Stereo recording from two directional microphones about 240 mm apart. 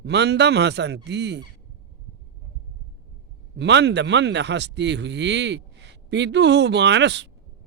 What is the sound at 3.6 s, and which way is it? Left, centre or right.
Speech, right.